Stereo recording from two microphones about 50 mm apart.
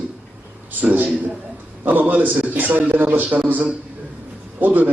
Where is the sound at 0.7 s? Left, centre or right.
Right.